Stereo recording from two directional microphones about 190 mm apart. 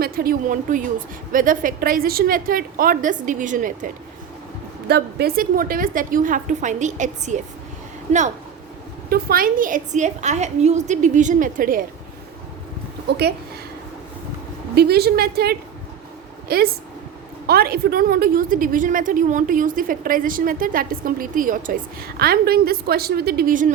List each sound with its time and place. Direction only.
0.0 s a woman's voice: 50° right (ahead or behind)
4.9 s a woman's voice: 60° right (ahead or behind); by 7.4 s 40° right (ahead or behind)
9.0 s a woman's voice: 50° right (ahead or behind)
13.1 s a woman's voice: 60° right (ahead or behind)
14.8 s a woman's voice: 55° right (ahead or behind)